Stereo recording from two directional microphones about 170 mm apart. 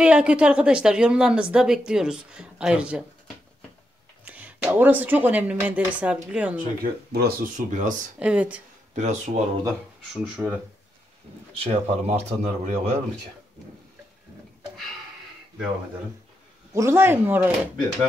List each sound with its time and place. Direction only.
0.0 s a woman's voice: 5° right (ahead or behind)
4.2 s speech: 10° right (ahead or behind)
6.8 s speech: 65° right (ahead or behind)
7.5 s speech: 50° right (ahead or behind)
8.2 s speech: 5° right (ahead or behind)
8.9 s speech: 45° right (ahead or behind)
10.1 s speech: 10° right (ahead or behind)
11.6 s speech: 35° right (ahead or behind)
16.7 s speech: 15° right (ahead or behind)